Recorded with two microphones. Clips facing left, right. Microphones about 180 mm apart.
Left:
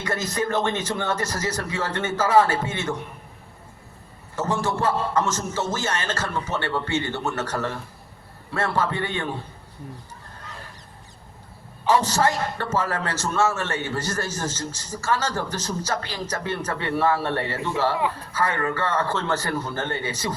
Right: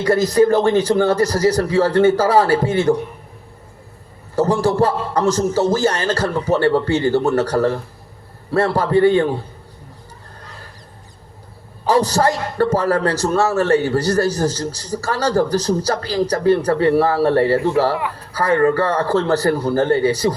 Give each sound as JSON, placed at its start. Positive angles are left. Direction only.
{"t": 0.0, "sound": "a man's voice", "side_deg": -35}
{"t": 4.4, "sound": "a man's voice", "side_deg": -35}
{"t": 11.9, "sound": "a man's voice", "side_deg": -35}